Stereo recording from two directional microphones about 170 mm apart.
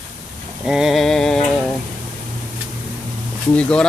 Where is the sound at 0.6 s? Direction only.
5° right (ahead or behind).